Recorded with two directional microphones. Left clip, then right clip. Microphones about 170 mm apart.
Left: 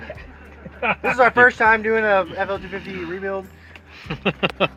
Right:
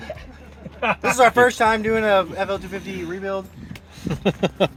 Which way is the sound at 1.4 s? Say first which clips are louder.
Left 3 dB; 60° right (ahead or behind).